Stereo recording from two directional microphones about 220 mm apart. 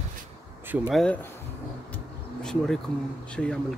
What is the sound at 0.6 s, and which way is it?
Speech, 5° right (ahead or behind).